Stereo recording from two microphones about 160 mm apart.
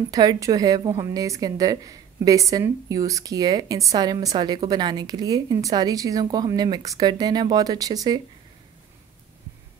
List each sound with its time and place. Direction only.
0.1 s a woman's voice: 25° right (ahead or behind)